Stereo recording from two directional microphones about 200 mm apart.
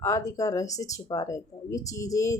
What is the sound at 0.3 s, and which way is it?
Speech, 15° left (ahead or behind).